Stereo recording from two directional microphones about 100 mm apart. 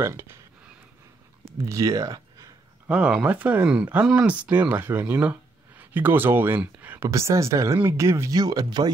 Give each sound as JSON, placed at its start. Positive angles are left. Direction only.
{"t": 0.0, "sound": "speech", "side_deg": -25}
{"t": 1.6, "sound": "speech", "side_deg": -30}
{"t": 2.9, "sound": "speech", "side_deg": -10}
{"t": 7.1, "sound": "speech", "side_deg": -30}
{"t": 8.4, "sound": "speech", "side_deg": -40}